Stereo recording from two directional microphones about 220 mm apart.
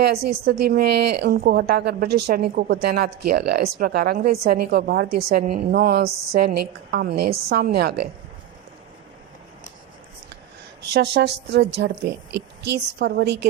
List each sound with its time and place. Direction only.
0.3 s a woman's voice: 45° right (ahead or behind)
7.3 s a woman's voice: 30° right (ahead or behind)
7.5 s a woman's voice: 45° right (ahead or behind)
10.8 s a woman's voice: 50° right (ahead or behind)